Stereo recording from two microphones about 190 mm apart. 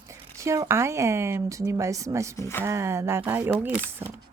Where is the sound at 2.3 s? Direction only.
15° left (ahead or behind).